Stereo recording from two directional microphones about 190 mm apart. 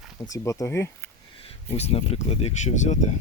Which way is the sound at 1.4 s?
35° left (ahead or behind).